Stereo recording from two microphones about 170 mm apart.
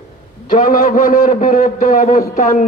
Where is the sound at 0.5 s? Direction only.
50° left (ahead or behind).